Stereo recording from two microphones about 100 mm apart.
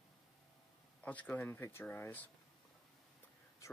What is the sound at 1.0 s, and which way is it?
Speech, 15° left (ahead or behind).